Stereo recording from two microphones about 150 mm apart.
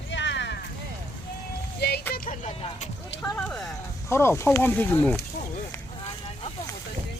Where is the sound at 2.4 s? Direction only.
50° left (ahead or behind).